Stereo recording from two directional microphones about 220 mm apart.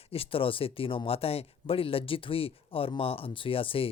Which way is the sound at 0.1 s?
25° left (ahead or behind).